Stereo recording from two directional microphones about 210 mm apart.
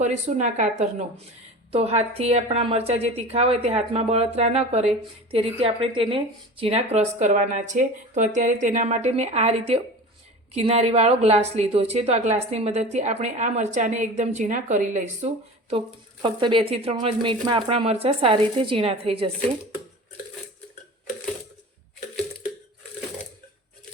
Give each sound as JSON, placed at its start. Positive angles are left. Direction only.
{"t": 0.0, "sound": "a woman's voice", "side_deg": -35}
{"t": 16.2, "sound": "a woman's voice", "side_deg": -25}